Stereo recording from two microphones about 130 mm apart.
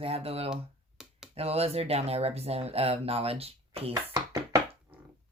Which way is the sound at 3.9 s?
30° right (ahead or behind).